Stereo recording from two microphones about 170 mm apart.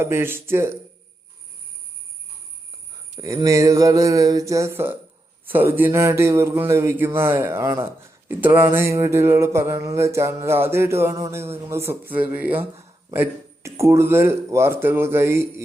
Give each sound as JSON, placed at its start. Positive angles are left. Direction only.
{"t": 0.0, "sound": "speech", "side_deg": -15}
{"t": 3.2, "sound": "a sound", "side_deg": -20}
{"t": 5.5, "sound": "speech", "side_deg": -10}